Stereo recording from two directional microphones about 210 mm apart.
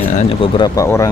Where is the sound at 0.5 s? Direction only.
15° left (ahead or behind).